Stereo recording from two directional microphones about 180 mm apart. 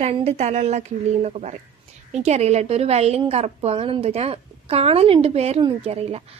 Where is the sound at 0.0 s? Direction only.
35° right (ahead or behind).